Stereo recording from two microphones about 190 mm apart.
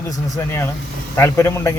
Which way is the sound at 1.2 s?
15° left (ahead or behind).